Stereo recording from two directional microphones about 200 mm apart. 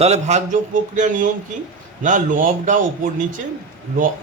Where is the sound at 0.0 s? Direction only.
35° right (ahead or behind).